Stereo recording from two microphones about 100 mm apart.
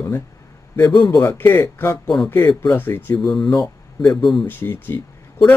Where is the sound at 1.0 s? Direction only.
40° left (ahead or behind).